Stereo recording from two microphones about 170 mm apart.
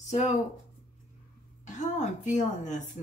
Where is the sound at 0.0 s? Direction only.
45° left (ahead or behind).